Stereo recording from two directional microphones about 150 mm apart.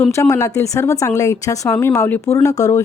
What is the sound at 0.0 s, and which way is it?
A woman's voice, 20° left (ahead or behind).